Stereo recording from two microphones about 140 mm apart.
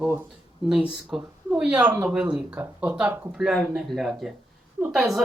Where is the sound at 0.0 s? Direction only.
15° right (ahead or behind).